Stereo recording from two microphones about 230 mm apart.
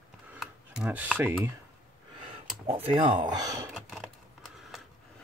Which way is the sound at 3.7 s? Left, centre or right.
Centre.